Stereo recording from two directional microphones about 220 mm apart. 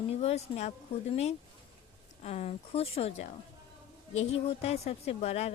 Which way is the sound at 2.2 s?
30° left (ahead or behind).